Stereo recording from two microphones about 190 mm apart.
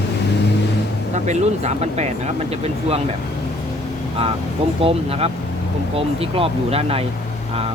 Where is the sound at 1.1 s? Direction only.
35° right (ahead or behind).